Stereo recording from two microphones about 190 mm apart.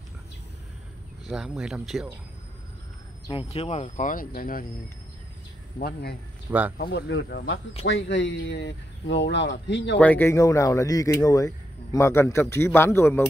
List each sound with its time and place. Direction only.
1.2 s speech: 5° right (ahead or behind)
3.3 s speech: 30° left (ahead or behind); by 4.6 s 50° left (ahead or behind)
5.8 s speech: 55° left (ahead or behind)
7.8 s speech: 75° left (ahead or behind)
9.9 s speech: 10° left (ahead or behind)